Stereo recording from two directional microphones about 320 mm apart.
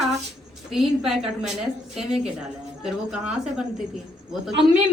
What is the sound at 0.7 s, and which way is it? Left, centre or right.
A woman's voice, centre.